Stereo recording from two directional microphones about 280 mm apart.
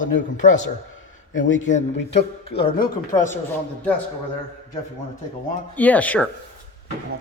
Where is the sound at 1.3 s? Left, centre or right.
Left.